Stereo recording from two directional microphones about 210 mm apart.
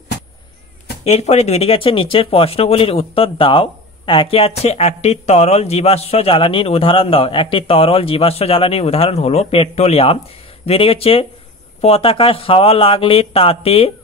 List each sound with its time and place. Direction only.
1.0 s speech: 30° left (ahead or behind)